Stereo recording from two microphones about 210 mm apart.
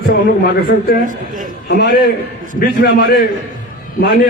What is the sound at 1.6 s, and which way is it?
A man's voice, 50° left (ahead or behind).